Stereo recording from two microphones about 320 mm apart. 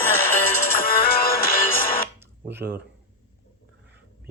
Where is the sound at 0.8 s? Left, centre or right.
Left.